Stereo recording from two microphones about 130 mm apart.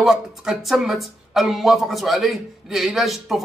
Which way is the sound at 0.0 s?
Centre (ahead or behind).